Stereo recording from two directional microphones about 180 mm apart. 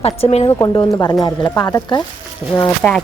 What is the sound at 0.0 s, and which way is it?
Speech, 35° left (ahead or behind).